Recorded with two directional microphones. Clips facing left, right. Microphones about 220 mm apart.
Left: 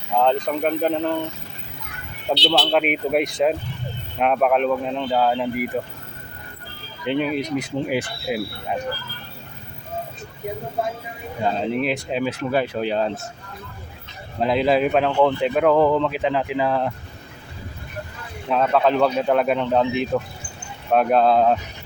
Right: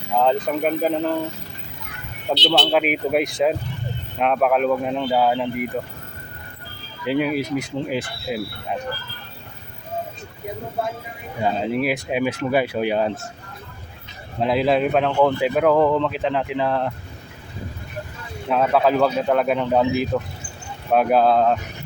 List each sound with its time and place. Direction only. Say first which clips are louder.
0.2 s speech: even; 5° right (ahead or behind)
2.5 s speech: right 1 dB; centre (ahead or behind)
7.0 s speech: right 1 dB; 5° right (ahead or behind)
7.9 s speech: left 2 dB; 10° left (ahead or behind)
11.6 s speech: right 1 dB; 5° right (ahead or behind)
14.3 s speech: even; centre (ahead or behind)
18.4 s speech: right 1 dB; 5° right (ahead or behind)